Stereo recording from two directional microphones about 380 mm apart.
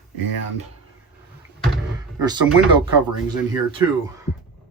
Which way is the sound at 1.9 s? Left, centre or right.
Centre.